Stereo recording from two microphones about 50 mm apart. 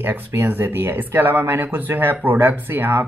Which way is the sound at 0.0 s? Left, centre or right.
Right.